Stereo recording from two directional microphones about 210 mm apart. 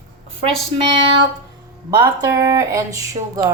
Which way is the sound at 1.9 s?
15° right (ahead or behind).